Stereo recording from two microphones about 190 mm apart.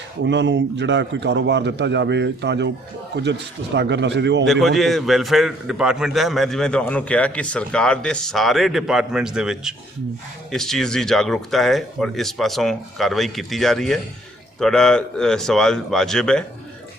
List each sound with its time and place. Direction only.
0.3 s a man's voice: 65° right (ahead or behind)
4.6 s a man's voice: centre (ahead or behind)